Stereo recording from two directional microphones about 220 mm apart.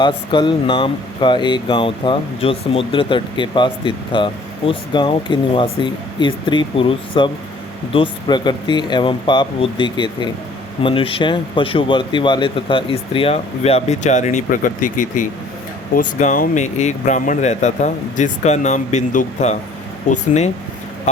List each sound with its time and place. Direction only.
0.0 s speech: 20° left (ahead or behind)